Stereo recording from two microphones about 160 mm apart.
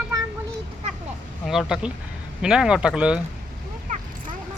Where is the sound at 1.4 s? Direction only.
5° right (ahead or behind).